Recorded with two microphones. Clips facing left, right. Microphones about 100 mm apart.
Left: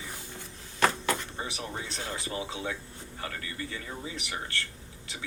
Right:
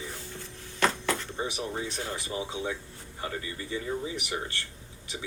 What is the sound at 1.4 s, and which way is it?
Speech, 20° right (ahead or behind).